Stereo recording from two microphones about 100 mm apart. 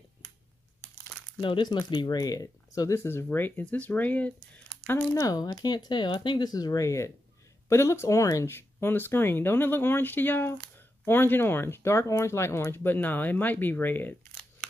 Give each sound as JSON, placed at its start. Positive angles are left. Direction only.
{"t": 1.4, "sound": "speech", "side_deg": 55}
{"t": 5.2, "sound": "speech", "side_deg": 40}